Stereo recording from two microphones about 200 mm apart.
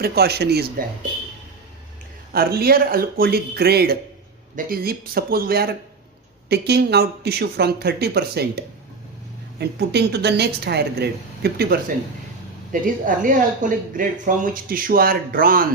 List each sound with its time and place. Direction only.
0.0 s speech: 50° right (ahead or behind)
2.3 s speech: 50° right (ahead or behind)
9.6 s a woman's voice: 55° right (ahead or behind)
12.7 s speech: 40° right (ahead or behind)